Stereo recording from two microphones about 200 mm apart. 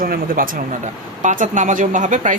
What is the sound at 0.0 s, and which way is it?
Speech, 45° right (ahead or behind).